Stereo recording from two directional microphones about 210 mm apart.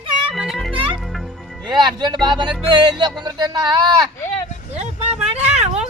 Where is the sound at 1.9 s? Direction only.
20° right (ahead or behind).